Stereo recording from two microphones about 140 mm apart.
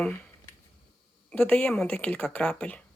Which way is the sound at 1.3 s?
5° left (ahead or behind).